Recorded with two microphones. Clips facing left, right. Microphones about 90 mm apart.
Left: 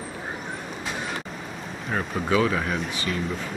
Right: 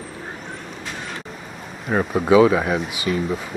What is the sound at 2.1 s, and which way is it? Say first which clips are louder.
Speech: right 9 dB; 10° right (ahead or behind).